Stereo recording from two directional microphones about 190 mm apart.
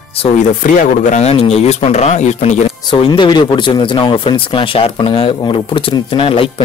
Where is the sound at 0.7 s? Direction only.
40° left (ahead or behind).